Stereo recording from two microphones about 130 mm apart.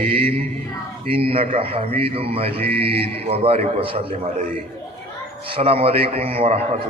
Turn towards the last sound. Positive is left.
turn(degrees=-45)  # may be behind; listen again after turning